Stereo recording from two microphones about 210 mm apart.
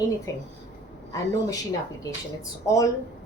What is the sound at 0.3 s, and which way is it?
Speech, 15° left (ahead or behind).